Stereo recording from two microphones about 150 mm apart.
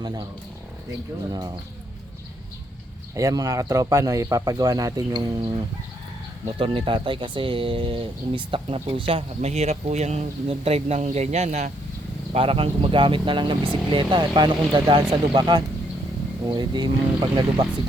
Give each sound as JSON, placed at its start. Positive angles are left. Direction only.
{"t": 0.0, "sound": "speech", "side_deg": -30}
{"t": 1.3, "sound": "speech", "side_deg": -25}
{"t": 3.2, "sound": "speech", "side_deg": -20}
{"t": 6.6, "sound": "speech", "side_deg": -35}